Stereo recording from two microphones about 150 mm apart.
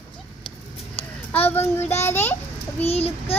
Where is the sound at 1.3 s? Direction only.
15° left (ahead or behind).